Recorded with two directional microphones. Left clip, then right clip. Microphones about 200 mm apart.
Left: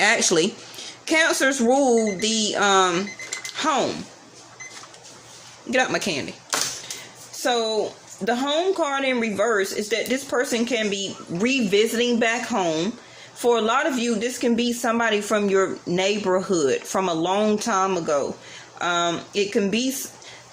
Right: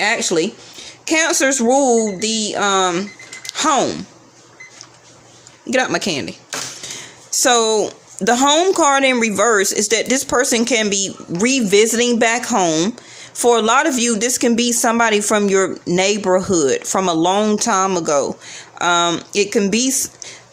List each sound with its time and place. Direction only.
0.0 s speech: 10° right (ahead or behind); by 3.9 s 30° right (ahead or behind)
5.7 s speech: 30° right (ahead or behind)
7.4 s speech: 45° right (ahead or behind)